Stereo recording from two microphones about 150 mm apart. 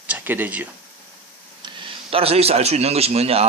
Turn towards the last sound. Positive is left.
turn(degrees=-45)  # may be behind; listen again after turning